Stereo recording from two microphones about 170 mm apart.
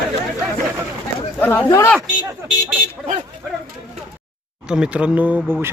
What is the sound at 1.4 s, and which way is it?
Speech, 10° left (ahead or behind).